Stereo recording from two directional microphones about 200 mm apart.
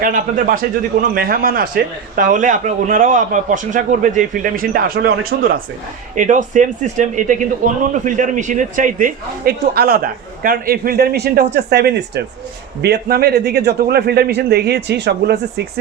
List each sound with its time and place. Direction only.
0.0 s a man's voice: 45° right (ahead or behind)